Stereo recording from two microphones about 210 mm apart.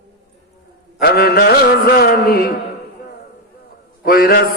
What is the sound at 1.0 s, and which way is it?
Music, 45° left (ahead or behind).